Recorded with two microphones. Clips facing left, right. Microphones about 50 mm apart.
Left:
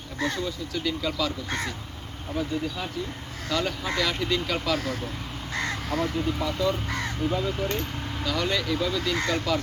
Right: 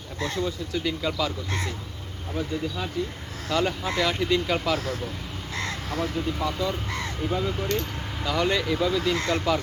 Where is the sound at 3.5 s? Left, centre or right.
Centre.